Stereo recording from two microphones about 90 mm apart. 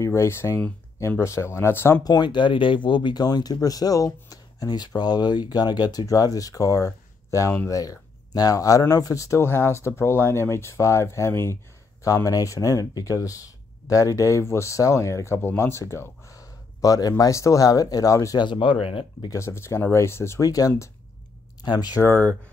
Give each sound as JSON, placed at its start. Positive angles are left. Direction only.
{"t": 0.0, "sound": "speech", "side_deg": 30}
{"t": 2.0, "sound": "speech", "side_deg": 55}
{"t": 12.0, "sound": "speech", "side_deg": 40}
{"t": 18.4, "sound": "speech", "side_deg": 60}
{"t": 19.3, "sound": "speech", "side_deg": 30}
{"t": 20.4, "sound": "speech", "side_deg": 40}
{"t": 21.6, "sound": "speech", "side_deg": 50}